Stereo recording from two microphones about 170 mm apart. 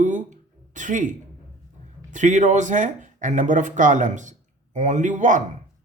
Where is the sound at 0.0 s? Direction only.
50° right (ahead or behind).